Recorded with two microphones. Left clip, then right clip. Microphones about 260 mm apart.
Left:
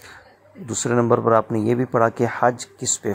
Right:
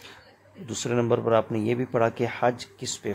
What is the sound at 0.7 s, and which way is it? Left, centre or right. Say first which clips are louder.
Speech: left 6 dB; centre.